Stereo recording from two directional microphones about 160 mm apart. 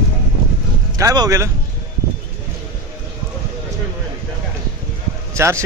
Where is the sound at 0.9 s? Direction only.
20° right (ahead or behind).